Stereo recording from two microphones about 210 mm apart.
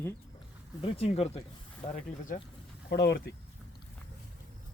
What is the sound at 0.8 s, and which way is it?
Speech, 30° left (ahead or behind).